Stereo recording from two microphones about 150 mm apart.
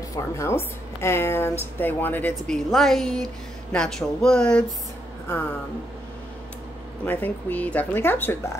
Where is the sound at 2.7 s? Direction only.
Centre (ahead or behind).